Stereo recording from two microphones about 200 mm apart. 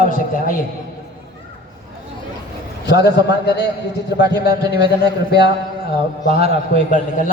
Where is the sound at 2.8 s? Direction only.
55° left (ahead or behind).